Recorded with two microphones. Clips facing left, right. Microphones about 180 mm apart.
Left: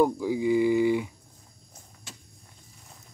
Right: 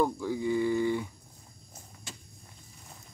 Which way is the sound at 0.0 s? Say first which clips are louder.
Left 5 dB; 10° left (ahead or behind).